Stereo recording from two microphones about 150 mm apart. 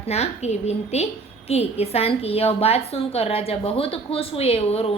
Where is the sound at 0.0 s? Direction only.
45° left (ahead or behind).